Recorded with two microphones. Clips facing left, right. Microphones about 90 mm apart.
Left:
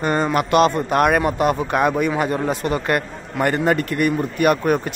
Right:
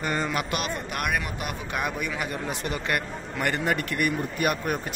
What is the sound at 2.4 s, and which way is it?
Speech, 60° left (ahead or behind).